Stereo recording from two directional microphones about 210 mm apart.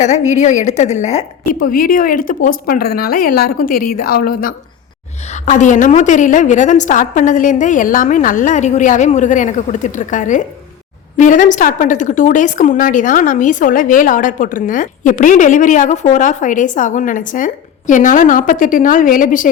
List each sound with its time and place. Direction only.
0.0 s a woman's voice: 35° left (ahead or behind)